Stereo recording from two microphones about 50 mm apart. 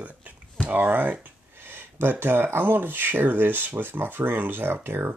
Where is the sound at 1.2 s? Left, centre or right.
Right.